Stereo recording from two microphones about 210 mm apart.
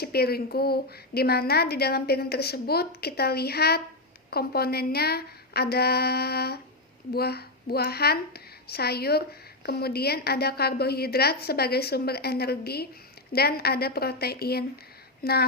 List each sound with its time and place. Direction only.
0.0 s a woman's voice: 45° left (ahead or behind)